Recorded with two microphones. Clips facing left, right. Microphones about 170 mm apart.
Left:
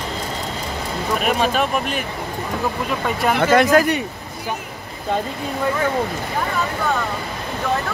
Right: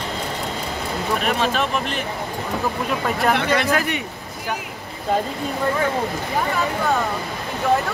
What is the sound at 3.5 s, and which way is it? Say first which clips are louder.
Speech: left 6 dB; 45° left (ahead or behind).